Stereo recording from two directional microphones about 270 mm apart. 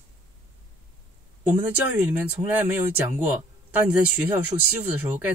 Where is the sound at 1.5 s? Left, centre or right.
Centre.